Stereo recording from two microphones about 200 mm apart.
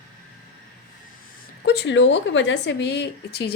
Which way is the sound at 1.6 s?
55° left (ahead or behind).